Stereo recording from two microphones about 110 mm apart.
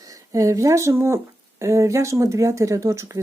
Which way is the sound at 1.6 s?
25° right (ahead or behind).